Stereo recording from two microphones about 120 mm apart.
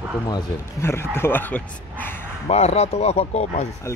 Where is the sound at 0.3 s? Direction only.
20° left (ahead or behind).